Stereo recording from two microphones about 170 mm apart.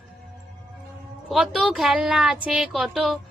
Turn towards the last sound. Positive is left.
turn(degrees=0)  # may be behind; listen again after turning